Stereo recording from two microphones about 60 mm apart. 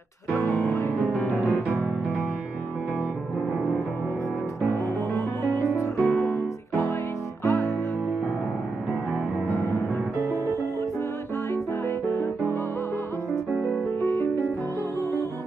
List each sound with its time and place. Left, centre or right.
0.4 s music: left
5.1 s music: left
7.4 s music: left
10.1 s music: right
12.1 s music: left
13.3 s music: left